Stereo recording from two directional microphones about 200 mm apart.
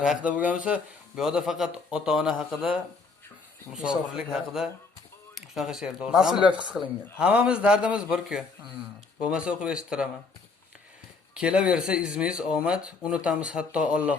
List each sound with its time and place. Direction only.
0.0 s speech: 5° right (ahead or behind)
11.3 s speech: 5° right (ahead or behind)